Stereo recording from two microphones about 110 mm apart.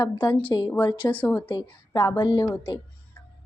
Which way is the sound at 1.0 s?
15° left (ahead or behind).